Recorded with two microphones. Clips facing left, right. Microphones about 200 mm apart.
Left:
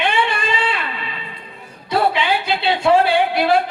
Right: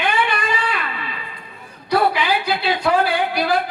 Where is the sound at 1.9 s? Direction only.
25° left (ahead or behind).